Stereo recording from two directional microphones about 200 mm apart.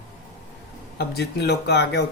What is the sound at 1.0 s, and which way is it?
Speech, 55° left (ahead or behind).